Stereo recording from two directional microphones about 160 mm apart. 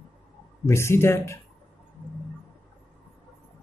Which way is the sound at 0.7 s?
15° left (ahead or behind).